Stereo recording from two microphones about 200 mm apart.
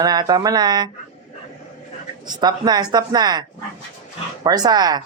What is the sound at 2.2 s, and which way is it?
Speech, 20° right (ahead or behind).